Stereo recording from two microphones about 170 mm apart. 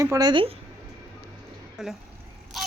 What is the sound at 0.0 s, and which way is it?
Speech, 20° right (ahead or behind).